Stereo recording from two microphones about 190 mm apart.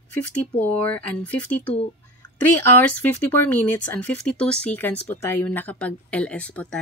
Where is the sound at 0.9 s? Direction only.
50° right (ahead or behind).